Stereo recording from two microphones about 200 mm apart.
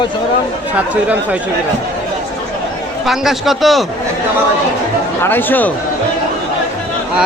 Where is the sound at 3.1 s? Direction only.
Centre (ahead or behind).